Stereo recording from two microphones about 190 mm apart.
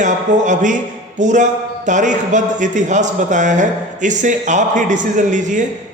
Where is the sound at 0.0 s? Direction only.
40° right (ahead or behind).